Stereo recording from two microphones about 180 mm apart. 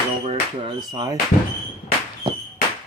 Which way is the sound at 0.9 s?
20° right (ahead or behind).